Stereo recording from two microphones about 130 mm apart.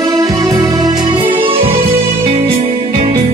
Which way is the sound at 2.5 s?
60° right (ahead or behind).